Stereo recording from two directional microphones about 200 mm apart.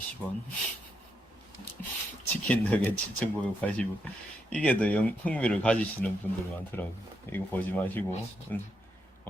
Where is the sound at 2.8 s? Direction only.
5° left (ahead or behind).